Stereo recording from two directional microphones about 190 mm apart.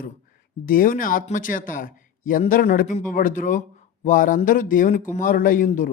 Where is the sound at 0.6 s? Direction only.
45° left (ahead or behind).